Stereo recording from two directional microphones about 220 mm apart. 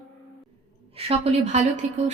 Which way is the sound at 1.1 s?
30° right (ahead or behind).